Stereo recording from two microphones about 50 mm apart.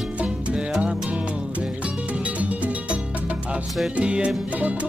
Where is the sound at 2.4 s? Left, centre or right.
Right.